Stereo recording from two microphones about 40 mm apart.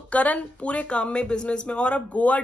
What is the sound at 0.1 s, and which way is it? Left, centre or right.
Speech, left.